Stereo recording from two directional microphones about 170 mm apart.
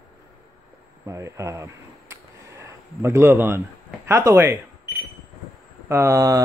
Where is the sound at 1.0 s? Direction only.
20° right (ahead or behind).